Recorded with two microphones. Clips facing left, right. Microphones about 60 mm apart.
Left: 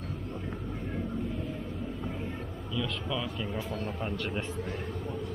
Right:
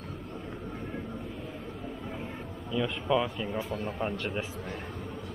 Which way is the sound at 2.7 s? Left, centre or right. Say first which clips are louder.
Right 6 dB; right.